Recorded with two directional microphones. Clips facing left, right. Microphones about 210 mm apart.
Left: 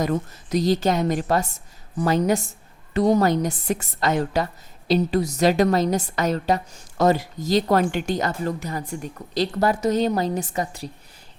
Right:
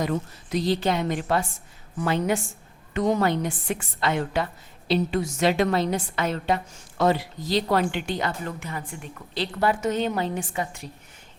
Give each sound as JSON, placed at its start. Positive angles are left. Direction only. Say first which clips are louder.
{"t": 0.0, "sound": "a woman's voice", "louder": "left 3 dB", "side_deg": 40}